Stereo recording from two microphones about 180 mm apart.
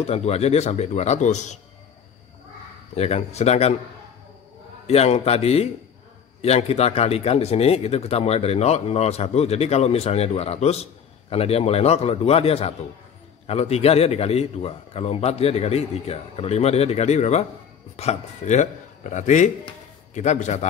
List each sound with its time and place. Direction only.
0.0 s speech: 35° left (ahead or behind)
3.0 s speech: 35° left (ahead or behind)
4.8 s speech: 35° left (ahead or behind)